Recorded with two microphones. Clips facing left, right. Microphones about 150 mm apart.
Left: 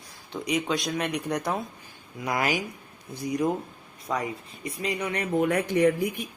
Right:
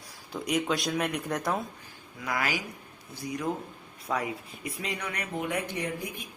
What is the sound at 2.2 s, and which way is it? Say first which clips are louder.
Speech: left 4 dB; 20° left (ahead or behind).